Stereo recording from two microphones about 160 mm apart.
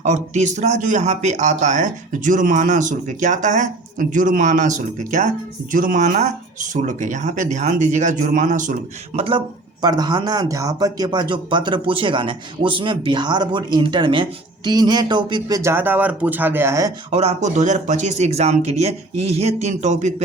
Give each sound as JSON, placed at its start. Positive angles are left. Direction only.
{"t": 0.0, "sound": "a man's voice", "side_deg": -45}
{"t": 9.1, "sound": "speech", "side_deg": -35}
{"t": 17.1, "sound": "a man's voice", "side_deg": -40}